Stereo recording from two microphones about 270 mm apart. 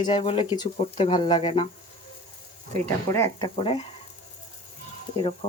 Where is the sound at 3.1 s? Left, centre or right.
Centre.